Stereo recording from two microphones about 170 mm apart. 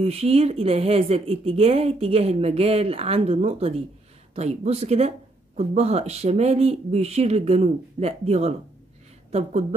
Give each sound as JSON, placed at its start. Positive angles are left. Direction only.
{"t": 0.0, "sound": "a woman's voice", "side_deg": -35}